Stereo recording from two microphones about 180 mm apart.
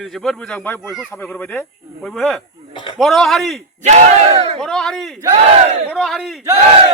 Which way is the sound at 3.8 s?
35° right (ahead or behind).